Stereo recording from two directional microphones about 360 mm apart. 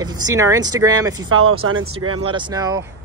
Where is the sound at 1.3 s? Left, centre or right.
Right.